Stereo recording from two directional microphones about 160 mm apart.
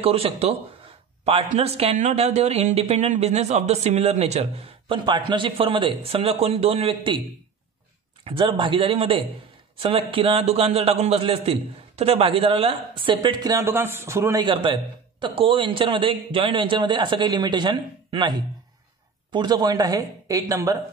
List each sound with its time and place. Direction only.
0.0 s speech: 35° right (ahead or behind)
8.2 s speech: 35° right (ahead or behind); by 14.4 s 15° right (ahead or behind)
14.4 s speech: 30° right (ahead or behind)